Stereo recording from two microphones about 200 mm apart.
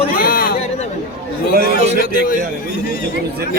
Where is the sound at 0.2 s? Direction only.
45° left (ahead or behind).